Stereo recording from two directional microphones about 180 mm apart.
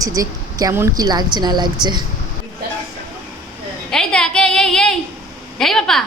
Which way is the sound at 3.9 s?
5° left (ahead or behind).